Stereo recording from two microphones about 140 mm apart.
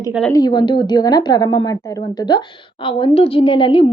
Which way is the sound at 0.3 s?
30° left (ahead or behind).